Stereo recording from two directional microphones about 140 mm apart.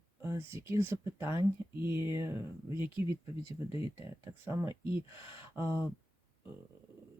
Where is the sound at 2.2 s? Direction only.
20° right (ahead or behind).